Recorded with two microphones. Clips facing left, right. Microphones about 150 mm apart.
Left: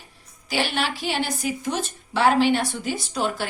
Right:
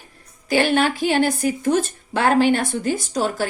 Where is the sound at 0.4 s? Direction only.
50° right (ahead or behind).